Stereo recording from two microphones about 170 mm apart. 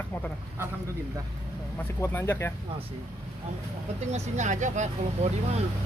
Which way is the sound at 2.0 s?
15° left (ahead or behind).